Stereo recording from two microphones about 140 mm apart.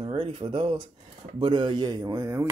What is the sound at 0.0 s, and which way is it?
Speech, 35° right (ahead or behind).